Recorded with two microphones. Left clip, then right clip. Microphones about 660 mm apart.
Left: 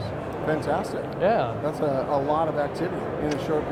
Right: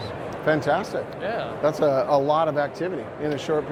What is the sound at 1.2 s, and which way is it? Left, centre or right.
Speech, left.